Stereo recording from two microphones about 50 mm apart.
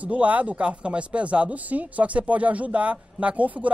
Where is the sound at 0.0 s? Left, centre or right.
Right.